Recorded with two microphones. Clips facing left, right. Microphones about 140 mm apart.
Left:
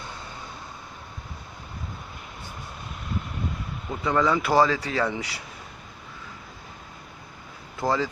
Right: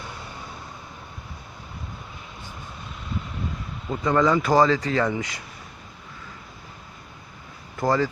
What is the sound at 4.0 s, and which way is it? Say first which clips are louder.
Speech: right 3 dB; 5° left (ahead or behind).